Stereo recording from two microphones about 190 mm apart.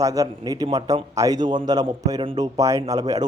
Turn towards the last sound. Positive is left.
turn(degrees=-20)  # may be behind; listen again after turning